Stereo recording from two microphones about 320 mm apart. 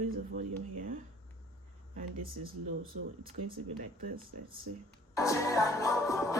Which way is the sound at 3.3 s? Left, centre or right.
Right.